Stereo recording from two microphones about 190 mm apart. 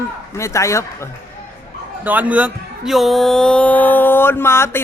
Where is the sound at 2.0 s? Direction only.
10° right (ahead or behind).